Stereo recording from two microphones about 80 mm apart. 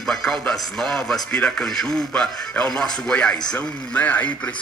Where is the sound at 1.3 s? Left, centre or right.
Centre.